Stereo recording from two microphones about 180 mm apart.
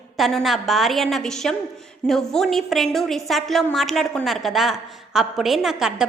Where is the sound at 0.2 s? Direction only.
Centre (ahead or behind).